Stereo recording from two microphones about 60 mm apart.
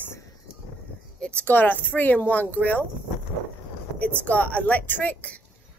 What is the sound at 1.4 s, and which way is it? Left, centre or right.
Speech, left.